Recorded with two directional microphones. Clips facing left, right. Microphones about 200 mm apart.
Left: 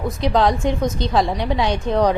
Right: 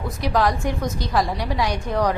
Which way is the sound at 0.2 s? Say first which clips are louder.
Left 3 dB; 25° left (ahead or behind).